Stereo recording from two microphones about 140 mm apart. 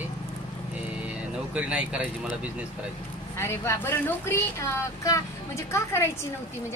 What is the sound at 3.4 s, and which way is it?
Speech, 20° left (ahead or behind).